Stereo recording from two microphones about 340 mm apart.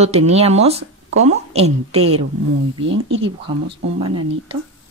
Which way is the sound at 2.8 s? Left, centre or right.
Right.